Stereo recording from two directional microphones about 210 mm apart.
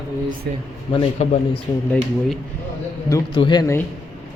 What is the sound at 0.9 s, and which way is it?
Speech, 25° left (ahead or behind).